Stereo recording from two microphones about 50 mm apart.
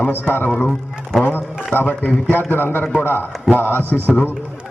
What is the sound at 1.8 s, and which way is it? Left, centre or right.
A man's voice, left.